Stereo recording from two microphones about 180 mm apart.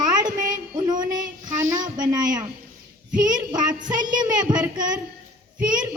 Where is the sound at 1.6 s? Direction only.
45° right (ahead or behind).